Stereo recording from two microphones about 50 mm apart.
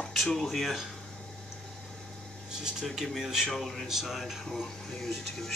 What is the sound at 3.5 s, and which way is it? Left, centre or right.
Speech, centre.